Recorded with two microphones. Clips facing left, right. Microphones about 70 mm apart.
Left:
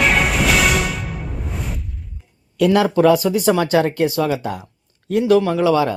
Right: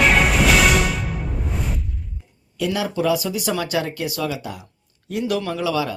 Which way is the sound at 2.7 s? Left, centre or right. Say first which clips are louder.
Left 7 dB; left.